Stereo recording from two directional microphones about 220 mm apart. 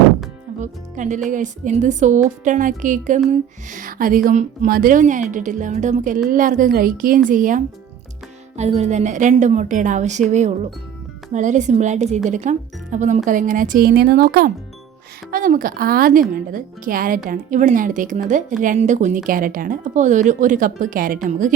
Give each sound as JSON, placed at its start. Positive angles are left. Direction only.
{"t": 0.6, "sound": "a woman's voice", "side_deg": -35}